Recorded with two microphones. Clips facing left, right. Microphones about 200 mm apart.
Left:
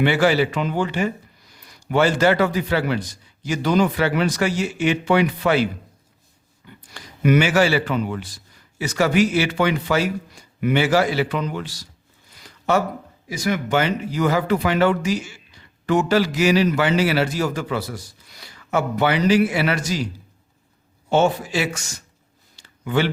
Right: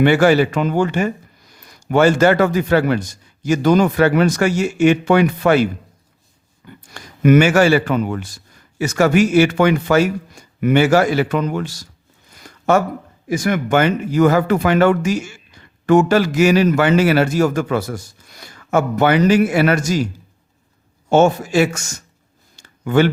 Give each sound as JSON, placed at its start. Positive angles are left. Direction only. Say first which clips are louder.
{"t": 0.0, "sound": "speech", "louder": "right 5 dB", "side_deg": -50}
{"t": 6.7, "sound": "speech", "louder": "right 4 dB", "side_deg": -50}
{"t": 12.3, "sound": "a sound", "louder": "right 5 dB", "side_deg": -50}
{"t": 13.2, "sound": "speech", "louder": "right 5 dB", "side_deg": -50}
{"t": 21.1, "sound": "speech", "louder": "right 5 dB", "side_deg": -45}
{"t": 22.5, "sound": "a sound", "louder": "right 6 dB", "side_deg": -45}